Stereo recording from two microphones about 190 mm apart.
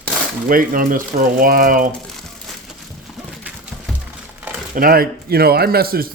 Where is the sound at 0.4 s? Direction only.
50° right (ahead or behind).